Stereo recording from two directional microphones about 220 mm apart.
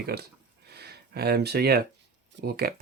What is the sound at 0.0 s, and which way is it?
Speech, 45° right (ahead or behind).